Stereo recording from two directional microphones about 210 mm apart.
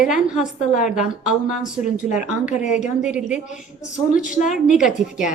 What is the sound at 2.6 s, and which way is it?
Speech, 35° left (ahead or behind).